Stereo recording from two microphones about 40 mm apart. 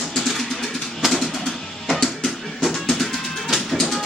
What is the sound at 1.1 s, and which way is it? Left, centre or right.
Bird, centre.